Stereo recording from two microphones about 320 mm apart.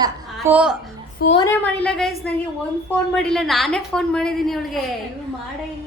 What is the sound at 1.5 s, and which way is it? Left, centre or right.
A woman's voice, centre.